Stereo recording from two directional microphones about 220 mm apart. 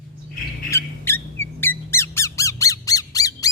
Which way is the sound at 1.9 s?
10° left (ahead or behind).